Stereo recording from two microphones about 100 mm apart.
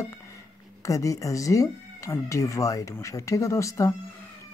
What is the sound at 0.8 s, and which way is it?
Speech, 35° left (ahead or behind).